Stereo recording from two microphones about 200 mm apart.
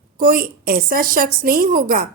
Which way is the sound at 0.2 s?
45° right (ahead or behind).